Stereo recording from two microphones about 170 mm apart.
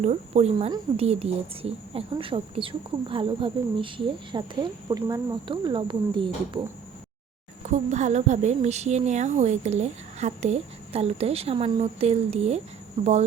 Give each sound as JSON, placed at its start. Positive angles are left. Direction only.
{"t": 0.0, "sound": "a woman's voice", "side_deg": -40}
{"t": 7.7, "sound": "a woman's voice", "side_deg": -45}